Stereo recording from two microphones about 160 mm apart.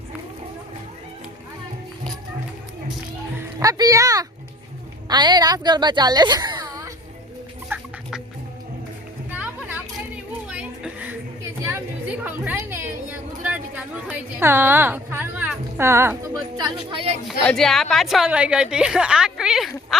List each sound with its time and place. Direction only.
3.3 s music: 20° right (ahead or behind)
5.0 s a woman's voice: 25° right (ahead or behind)
7.7 s chicken: 15° right (ahead or behind)
9.3 s music: 10° right (ahead or behind)
10.5 s a sound: 5° right (ahead or behind); by 17.2 s 35° right (ahead or behind)
17.2 s a woman's voice: 5° left (ahead or behind)